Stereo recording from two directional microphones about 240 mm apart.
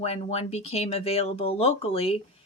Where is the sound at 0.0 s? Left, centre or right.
Left.